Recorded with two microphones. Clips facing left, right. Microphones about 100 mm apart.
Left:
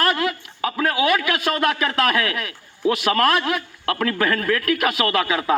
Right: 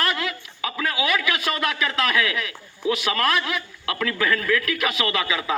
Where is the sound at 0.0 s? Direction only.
40° left (ahead or behind).